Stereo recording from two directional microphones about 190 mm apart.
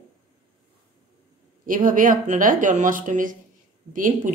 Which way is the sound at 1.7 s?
45° right (ahead or behind).